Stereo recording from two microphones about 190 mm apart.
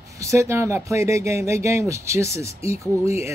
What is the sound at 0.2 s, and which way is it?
Speech, 15° right (ahead or behind).